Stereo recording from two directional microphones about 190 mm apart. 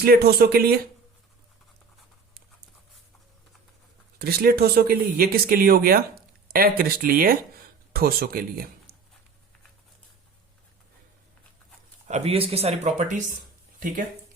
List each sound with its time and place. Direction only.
0.0 s speech: 55° right (ahead or behind)
4.2 s speech: 55° right (ahead or behind)
12.0 s speech: 35° right (ahead or behind)